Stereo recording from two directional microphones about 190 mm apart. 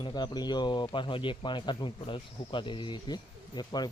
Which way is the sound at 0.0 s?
20° left (ahead or behind).